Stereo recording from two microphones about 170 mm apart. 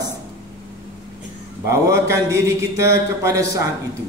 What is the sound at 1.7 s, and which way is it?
Mantra, 15° right (ahead or behind).